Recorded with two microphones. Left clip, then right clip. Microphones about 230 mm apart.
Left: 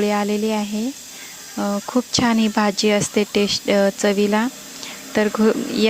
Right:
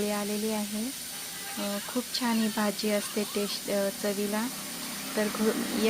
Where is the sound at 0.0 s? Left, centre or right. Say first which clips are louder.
Left 11 dB; left.